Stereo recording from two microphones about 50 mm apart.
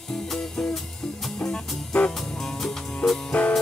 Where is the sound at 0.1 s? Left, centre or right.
Centre.